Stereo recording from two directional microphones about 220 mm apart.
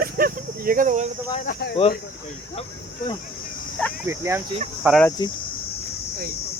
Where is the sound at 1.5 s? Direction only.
45° left (ahead or behind).